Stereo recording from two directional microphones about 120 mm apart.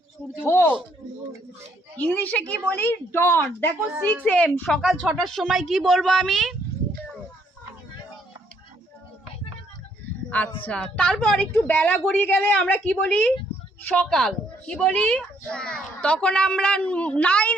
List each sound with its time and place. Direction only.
0.4 s a sound: 20° left (ahead or behind)
2.0 s a woman's voice: 15° left (ahead or behind)
10.7 s a woman's voice: 10° left (ahead or behind)